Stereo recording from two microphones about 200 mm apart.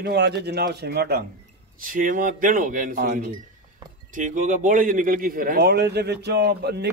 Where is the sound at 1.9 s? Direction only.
40° right (ahead or behind).